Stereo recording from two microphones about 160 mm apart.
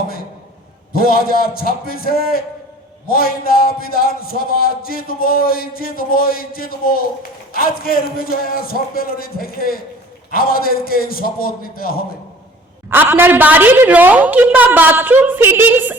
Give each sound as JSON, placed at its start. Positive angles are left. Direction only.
{"t": 0.9, "sound": "a man's voice", "side_deg": 65}
{"t": 12.9, "sound": "a woman's voice", "side_deg": -15}